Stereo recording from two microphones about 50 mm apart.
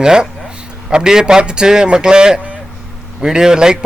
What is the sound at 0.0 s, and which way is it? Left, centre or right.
A man's voice, centre.